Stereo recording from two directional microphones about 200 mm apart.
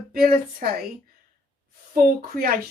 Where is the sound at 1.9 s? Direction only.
45° right (ahead or behind).